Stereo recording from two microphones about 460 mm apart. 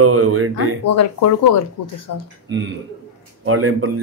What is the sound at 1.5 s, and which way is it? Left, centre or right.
Speech, left.